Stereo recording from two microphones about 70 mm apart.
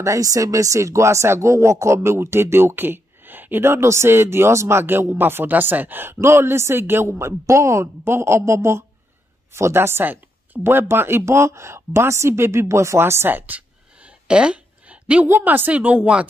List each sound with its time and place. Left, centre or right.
0.0 s speech: right; by 15.2 s centre
15.2 s a woman's voice: right